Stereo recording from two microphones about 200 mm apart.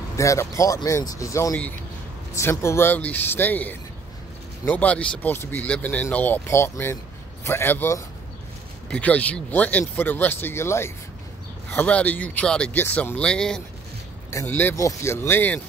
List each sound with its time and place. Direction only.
0.2 s speech: 15° left (ahead or behind)